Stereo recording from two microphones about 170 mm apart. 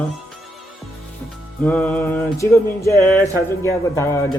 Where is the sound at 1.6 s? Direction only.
5° left (ahead or behind).